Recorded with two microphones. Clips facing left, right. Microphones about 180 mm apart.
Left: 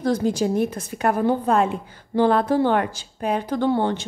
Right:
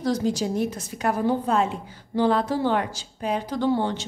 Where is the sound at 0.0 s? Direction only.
55° left (ahead or behind).